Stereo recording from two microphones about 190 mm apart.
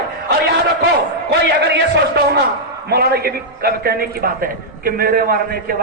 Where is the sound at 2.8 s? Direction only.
55° right (ahead or behind).